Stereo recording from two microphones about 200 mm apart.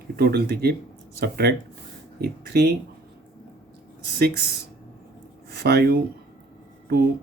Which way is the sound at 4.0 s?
50° right (ahead or behind).